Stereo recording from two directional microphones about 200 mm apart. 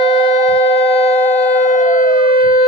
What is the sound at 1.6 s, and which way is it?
Siren, 40° left (ahead or behind).